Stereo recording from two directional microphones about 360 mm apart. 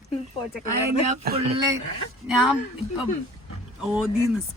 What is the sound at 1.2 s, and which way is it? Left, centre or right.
Speech, right.